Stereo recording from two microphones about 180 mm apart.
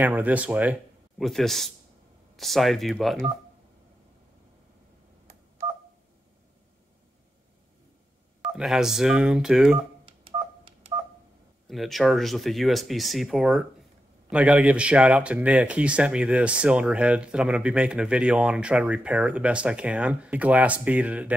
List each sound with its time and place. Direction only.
0.0 s speech: 10° right (ahead or behind)
1.1 s speech: centre (ahead or behind)
8.4 s speech: 5° right (ahead or behind)
10.0 s telephone dialing: 30° right (ahead or behind)
11.6 s speech: centre (ahead or behind)